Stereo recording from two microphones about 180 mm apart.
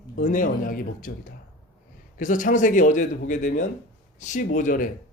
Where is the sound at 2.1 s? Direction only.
45° left (ahead or behind).